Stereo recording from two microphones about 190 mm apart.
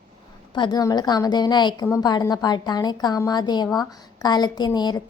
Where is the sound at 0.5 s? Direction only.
25° left (ahead or behind).